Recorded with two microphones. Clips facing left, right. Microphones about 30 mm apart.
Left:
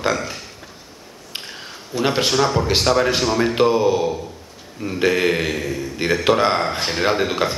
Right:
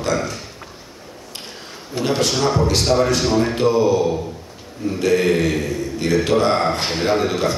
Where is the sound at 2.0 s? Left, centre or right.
Left.